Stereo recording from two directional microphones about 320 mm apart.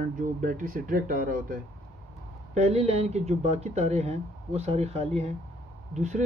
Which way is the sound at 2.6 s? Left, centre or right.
Centre.